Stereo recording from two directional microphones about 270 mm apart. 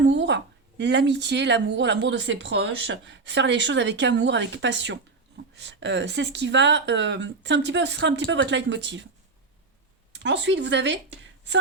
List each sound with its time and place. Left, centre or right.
0.0 s a woman's voice: right
10.2 s a woman's voice: right